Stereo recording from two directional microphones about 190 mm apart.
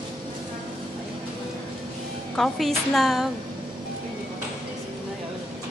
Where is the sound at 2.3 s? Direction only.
Centre (ahead or behind).